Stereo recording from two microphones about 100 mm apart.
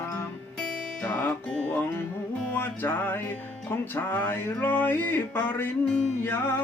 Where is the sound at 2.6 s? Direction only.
25° left (ahead or behind).